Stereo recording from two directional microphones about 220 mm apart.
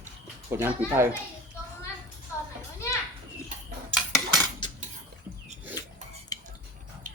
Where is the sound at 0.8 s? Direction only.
15° left (ahead or behind).